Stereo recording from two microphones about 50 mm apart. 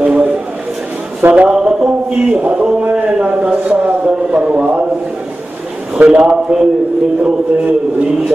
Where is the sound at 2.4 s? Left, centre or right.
Right.